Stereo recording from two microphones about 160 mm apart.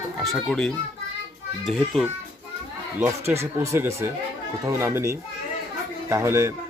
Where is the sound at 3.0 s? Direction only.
15° right (ahead or behind).